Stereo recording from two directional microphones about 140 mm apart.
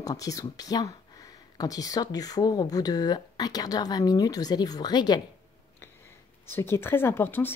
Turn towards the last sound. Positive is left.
turn(degrees=15)  # may be behind; listen again after turning